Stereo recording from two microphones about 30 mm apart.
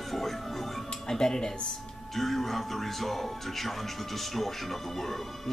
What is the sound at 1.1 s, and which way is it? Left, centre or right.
Speech, left.